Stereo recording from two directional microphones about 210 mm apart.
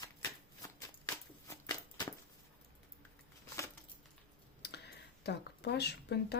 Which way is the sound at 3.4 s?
15° left (ahead or behind).